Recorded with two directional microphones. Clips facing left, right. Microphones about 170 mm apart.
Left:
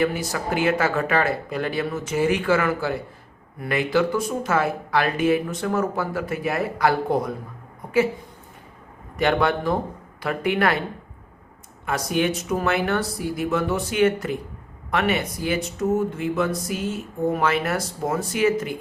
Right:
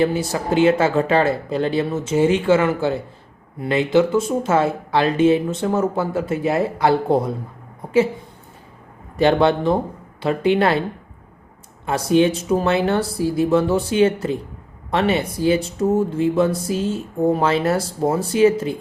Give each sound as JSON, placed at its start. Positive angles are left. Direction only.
{"t": 0.0, "sound": "speech", "side_deg": -25}
{"t": 9.1, "sound": "speech", "side_deg": -30}
{"t": 11.9, "sound": "speech", "side_deg": -30}